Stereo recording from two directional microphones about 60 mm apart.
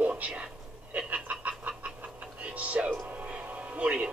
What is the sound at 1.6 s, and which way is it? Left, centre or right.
Chicken, right.